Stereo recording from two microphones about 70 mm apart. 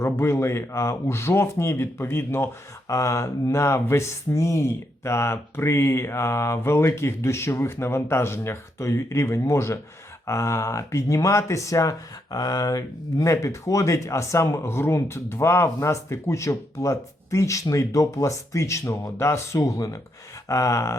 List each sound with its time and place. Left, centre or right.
0.0 s speech: left
2.9 s speech: left